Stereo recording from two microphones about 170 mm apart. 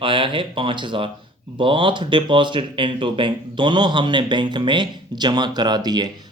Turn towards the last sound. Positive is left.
turn(degrees=-25)  # may be behind; listen again after turning